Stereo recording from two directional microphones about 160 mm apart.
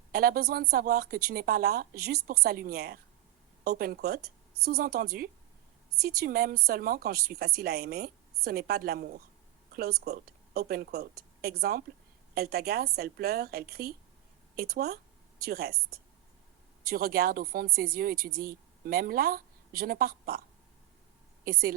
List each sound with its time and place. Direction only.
0.1 s a woman's voice: 70° right (ahead or behind)
16.8 s speech: 70° right (ahead or behind)
21.4 s a woman's voice: 65° right (ahead or behind)